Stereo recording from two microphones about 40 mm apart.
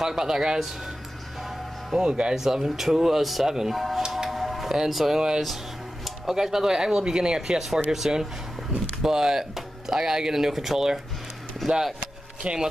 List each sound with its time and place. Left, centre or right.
0.0 s speech: centre
2.0 s speech: right
2.3 s speech: centre
4.1 s music: centre
4.8 s speech: centre
5.1 s speech: right
12.4 s speech: right